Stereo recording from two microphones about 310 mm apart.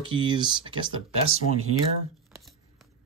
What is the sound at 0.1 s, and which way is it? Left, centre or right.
Speech, centre.